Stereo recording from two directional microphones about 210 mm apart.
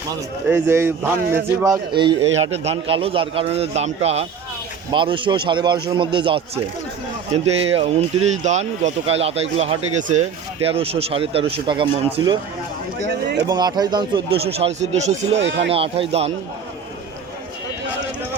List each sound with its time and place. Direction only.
0.4 s speech: 10° right (ahead or behind)
2.1 s speech: 65° right (ahead or behind)
2.4 s speech: 30° right (ahead or behind)
13.5 s speech: 20° right (ahead or behind)
15.4 s speech: 60° right (ahead or behind)
15.7 s speech: 25° right (ahead or behind)